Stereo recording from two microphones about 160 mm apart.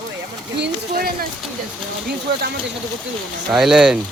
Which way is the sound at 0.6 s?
75° right (ahead or behind).